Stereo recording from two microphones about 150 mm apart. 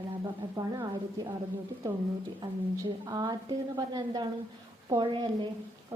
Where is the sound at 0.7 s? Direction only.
30° right (ahead or behind).